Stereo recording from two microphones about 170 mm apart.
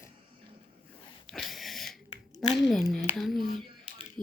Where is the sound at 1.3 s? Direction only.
Centre (ahead or behind).